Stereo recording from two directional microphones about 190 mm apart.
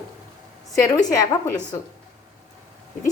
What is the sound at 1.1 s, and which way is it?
Speech, 20° left (ahead or behind).